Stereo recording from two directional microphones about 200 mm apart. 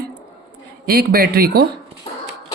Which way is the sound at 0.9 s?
50° right (ahead or behind).